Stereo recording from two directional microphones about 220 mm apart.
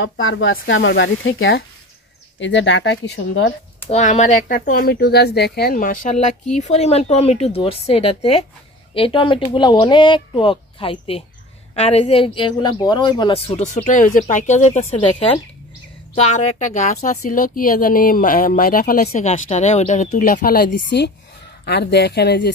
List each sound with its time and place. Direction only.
0.0 s speech: 60° left (ahead or behind)
3.9 s a woman's voice: 30° left (ahead or behind); by 22.5 s 50° left (ahead or behind)